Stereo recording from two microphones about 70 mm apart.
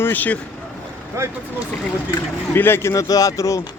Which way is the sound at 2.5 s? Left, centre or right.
Left.